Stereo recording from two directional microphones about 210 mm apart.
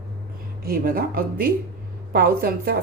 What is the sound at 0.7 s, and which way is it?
A woman's voice, 45° right (ahead or behind).